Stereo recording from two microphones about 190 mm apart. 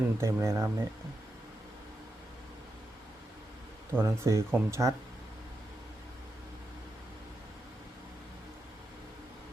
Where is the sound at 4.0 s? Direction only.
15° right (ahead or behind).